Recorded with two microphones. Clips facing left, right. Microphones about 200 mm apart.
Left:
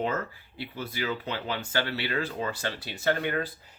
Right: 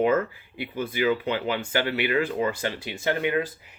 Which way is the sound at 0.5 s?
15° right (ahead or behind).